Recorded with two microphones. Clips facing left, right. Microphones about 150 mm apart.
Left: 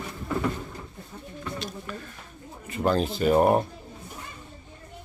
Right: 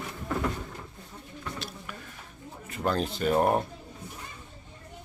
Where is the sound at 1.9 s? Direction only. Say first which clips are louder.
Left 6 dB; 10° right (ahead or behind).